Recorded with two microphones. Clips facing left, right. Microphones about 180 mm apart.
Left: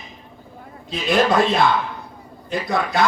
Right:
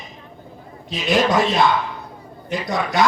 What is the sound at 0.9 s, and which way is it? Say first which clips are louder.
Music: even; 60° left (ahead or behind).